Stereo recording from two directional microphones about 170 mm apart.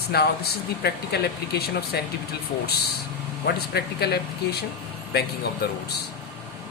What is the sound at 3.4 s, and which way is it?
Speech, 70° left (ahead or behind).